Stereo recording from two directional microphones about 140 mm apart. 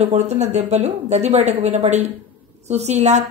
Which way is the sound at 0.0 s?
50° right (ahead or behind).